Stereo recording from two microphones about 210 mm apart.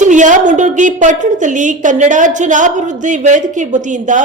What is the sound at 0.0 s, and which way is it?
A woman's voice, 35° right (ahead or behind).